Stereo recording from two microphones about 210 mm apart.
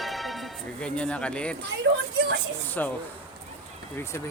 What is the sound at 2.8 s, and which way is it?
Speech, 10° left (ahead or behind).